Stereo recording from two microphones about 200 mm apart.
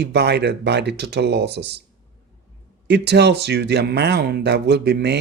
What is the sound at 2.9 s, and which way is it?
Speech, 55° right (ahead or behind).